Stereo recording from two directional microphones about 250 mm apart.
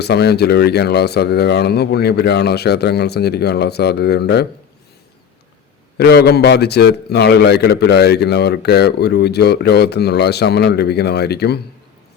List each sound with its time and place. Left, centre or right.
0.0 s a man's voice: left
6.0 s a man's voice: left